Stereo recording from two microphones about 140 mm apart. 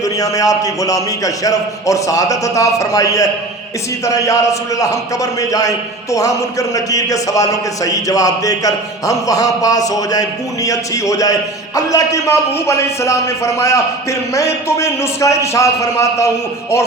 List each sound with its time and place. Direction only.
0.0 s a man's voice: 25° left (ahead or behind)